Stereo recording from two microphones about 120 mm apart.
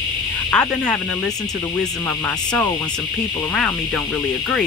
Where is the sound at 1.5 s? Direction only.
30° left (ahead or behind).